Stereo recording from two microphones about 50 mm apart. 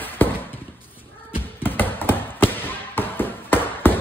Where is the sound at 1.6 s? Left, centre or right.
Left.